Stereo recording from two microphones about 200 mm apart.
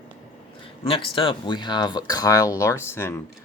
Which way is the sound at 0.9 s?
25° left (ahead or behind).